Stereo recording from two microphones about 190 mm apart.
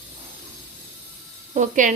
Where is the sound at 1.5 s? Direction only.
40° right (ahead or behind).